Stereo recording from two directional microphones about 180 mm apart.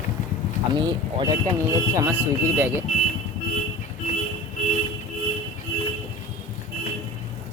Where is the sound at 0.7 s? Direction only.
25° right (ahead or behind).